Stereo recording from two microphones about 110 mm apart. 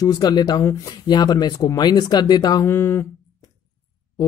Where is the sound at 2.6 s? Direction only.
20° left (ahead or behind).